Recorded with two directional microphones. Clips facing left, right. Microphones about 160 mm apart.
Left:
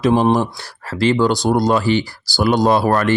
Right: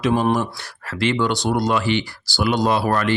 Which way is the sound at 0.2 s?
35° left (ahead or behind).